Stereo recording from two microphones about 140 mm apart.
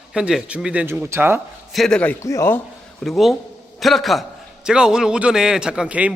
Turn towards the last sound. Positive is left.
turn(degrees=-10)  # may be behind; listen again after turning